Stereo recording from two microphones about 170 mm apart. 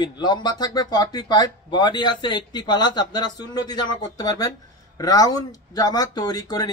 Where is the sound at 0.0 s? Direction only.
25° left (ahead or behind).